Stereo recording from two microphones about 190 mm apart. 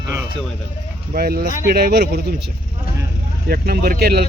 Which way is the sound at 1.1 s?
50° right (ahead or behind).